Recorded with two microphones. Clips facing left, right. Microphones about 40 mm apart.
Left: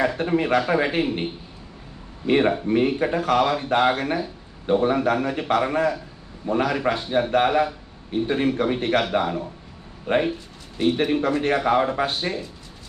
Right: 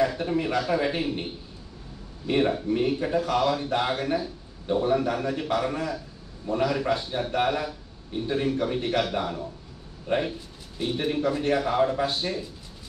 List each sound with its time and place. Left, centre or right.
0.2 s a man's voice: left
2.2 s a man's voice: left